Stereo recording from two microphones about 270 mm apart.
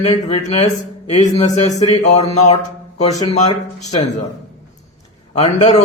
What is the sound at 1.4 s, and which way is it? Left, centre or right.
Speech, centre.